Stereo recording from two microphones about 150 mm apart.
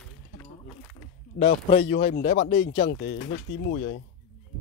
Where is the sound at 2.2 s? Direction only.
45° left (ahead or behind).